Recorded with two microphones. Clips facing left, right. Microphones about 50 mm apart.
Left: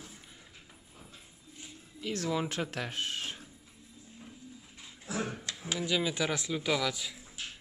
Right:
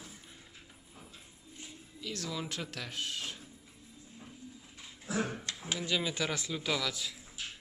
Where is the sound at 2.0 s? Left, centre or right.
Left.